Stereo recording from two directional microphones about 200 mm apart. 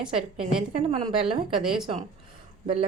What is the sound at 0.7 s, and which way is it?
Speech, 30° right (ahead or behind).